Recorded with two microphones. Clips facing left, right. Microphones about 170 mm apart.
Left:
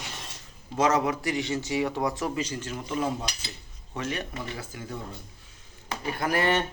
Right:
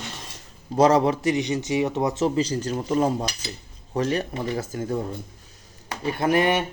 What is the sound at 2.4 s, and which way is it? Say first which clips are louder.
Speech: right 8 dB; 40° right (ahead or behind).